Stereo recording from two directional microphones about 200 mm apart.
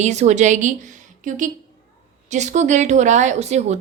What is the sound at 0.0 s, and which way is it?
A woman's voice, 35° right (ahead or behind).